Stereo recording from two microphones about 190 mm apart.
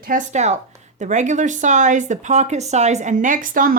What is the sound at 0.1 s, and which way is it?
Speech, 40° right (ahead or behind).